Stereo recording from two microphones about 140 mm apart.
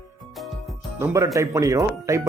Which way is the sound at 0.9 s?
20° right (ahead or behind).